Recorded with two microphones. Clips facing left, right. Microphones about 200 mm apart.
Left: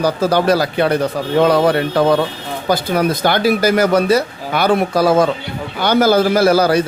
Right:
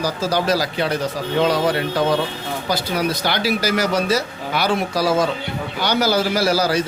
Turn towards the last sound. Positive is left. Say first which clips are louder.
# left 6 dB
turn(degrees=60)  # may be behind; listen again after turning